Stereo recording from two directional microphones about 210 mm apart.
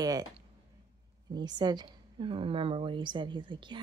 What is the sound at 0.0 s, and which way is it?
Speech, 15° right (ahead or behind).